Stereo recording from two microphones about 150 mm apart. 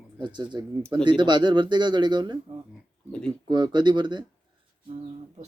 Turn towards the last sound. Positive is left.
turn(degrees=-30)  # may be behind; listen again after turning